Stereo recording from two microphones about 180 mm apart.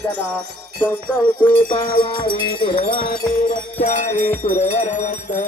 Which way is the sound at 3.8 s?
40° left (ahead or behind).